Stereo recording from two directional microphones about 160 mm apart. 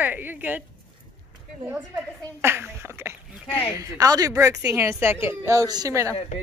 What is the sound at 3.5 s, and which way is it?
Speech, 10° left (ahead or behind).